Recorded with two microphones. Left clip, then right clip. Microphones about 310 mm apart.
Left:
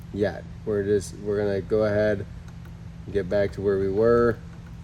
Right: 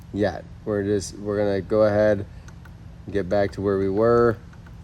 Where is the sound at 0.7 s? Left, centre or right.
Right.